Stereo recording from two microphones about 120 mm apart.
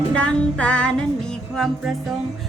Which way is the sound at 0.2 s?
10° left (ahead or behind).